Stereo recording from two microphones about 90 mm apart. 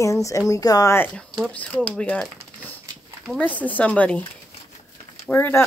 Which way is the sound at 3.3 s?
20° left (ahead or behind).